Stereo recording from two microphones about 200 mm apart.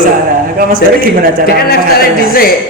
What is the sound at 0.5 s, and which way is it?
Speech, 45° right (ahead or behind).